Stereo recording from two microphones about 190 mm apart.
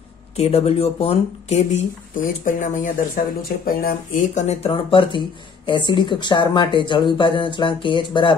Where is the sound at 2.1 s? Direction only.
45° left (ahead or behind).